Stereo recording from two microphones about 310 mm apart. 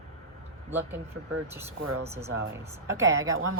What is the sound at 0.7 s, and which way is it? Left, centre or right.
Speech, centre.